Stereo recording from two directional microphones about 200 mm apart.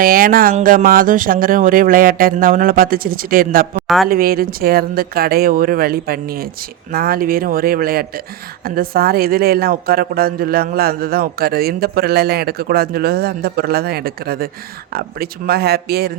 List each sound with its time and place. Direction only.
0.0 s speech: 45° right (ahead or behind)
3.8 s speech: centre (ahead or behind)
4.1 s speech: 45° right (ahead or behind)